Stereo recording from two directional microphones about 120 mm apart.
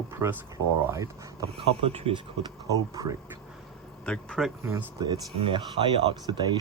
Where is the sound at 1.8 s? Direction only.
50° right (ahead or behind).